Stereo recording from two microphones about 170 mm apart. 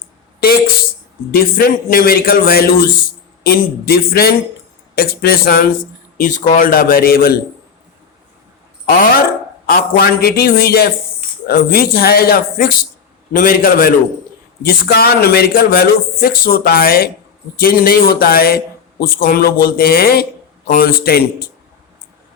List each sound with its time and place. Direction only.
1.3 s speech: 60° left (ahead or behind)
6.1 s speech: 50° left (ahead or behind)
8.9 s speech: 60° left (ahead or behind)
14.6 s speech: 65° left (ahead or behind)